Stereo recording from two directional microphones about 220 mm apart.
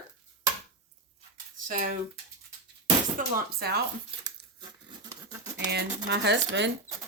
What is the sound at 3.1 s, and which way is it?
Speech, 40° right (ahead or behind).